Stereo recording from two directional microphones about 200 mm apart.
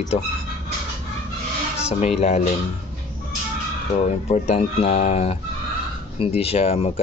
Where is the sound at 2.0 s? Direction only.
30° left (ahead or behind).